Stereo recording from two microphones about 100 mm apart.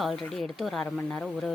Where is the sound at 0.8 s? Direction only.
15° left (ahead or behind).